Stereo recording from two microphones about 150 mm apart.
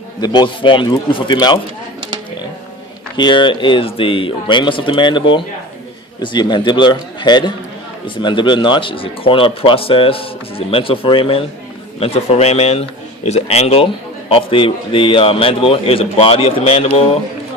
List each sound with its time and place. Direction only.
0.2 s a man's voice: 30° left (ahead or behind)
3.2 s a man's voice: 30° left (ahead or behind)